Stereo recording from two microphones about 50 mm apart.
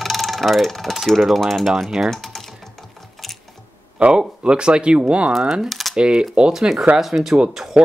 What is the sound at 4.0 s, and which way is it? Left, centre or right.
Speech, centre.